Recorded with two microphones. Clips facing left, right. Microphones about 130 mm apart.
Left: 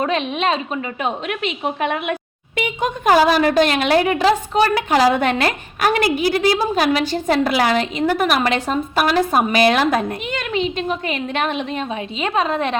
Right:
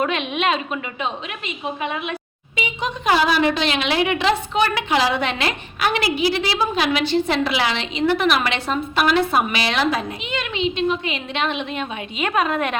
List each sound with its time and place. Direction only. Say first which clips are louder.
0.0 s a woman's voice: left 2 dB; 35° left (ahead or behind)
1.0 s a woman's voice: left 5 dB; 70° left (ahead or behind); by 12.7 s 30° left (ahead or behind)